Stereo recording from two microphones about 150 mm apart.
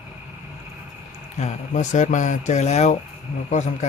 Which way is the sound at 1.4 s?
55° left (ahead or behind).